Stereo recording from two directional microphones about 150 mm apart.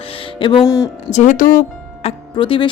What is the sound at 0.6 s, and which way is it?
Speech, 20° left (ahead or behind).